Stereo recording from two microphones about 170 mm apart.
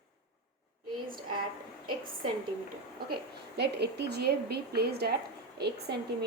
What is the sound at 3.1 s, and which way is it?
A woman's voice, 80° right.